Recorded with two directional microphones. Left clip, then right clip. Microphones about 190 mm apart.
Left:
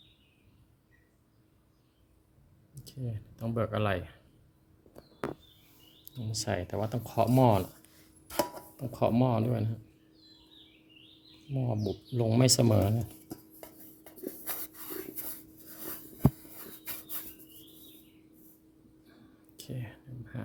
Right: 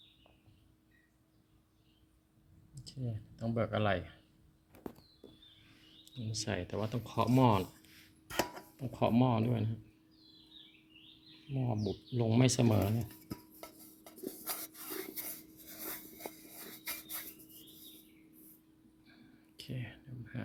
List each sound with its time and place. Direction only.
2.7 s speech: centre (ahead or behind)
6.1 s speech: 15° left (ahead or behind)
8.5 s speech: 5° left (ahead or behind)
11.5 s speech: centre (ahead or behind)
14.4 s a sound: 15° left (ahead or behind)
16.6 s rub: 20° left (ahead or behind)
19.0 s a sound: 5° left (ahead or behind)